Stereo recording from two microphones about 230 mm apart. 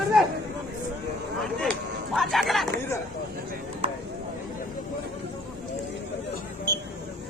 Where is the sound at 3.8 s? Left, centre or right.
Right.